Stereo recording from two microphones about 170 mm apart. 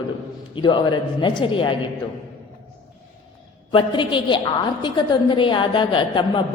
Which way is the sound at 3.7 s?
30° left (ahead or behind).